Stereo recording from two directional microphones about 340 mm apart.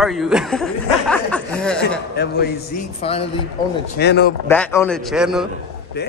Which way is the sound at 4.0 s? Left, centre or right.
Left.